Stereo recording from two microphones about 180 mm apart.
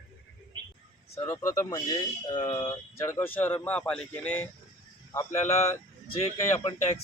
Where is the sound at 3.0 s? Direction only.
15° left (ahead or behind).